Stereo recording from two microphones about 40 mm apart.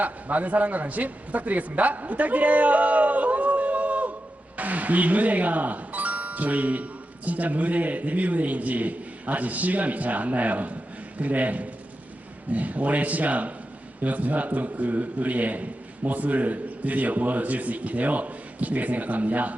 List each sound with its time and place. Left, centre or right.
0.0 s a man's voice: right